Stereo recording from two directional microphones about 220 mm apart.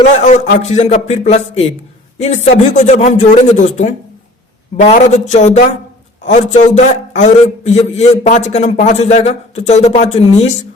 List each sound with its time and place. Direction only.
0.2 s a man's voice: 35° left (ahead or behind)